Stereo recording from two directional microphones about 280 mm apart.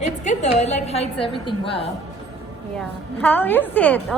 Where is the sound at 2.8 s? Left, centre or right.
Centre.